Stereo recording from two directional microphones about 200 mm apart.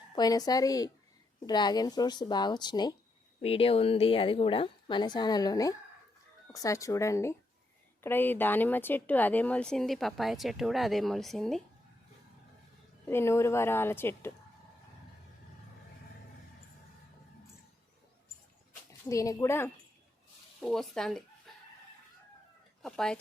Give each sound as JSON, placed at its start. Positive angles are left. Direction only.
{"t": 0.2, "sound": "a woman's voice", "side_deg": 20}
{"t": 13.1, "sound": "a woman's voice", "side_deg": 10}
{"t": 19.0, "sound": "a woman's voice", "side_deg": 15}
{"t": 20.6, "sound": "speech", "side_deg": 0}
{"t": 22.8, "sound": "speech", "side_deg": 5}